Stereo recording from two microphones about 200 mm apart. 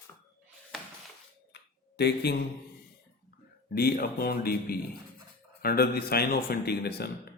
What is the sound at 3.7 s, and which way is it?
Speech, 50° left (ahead or behind).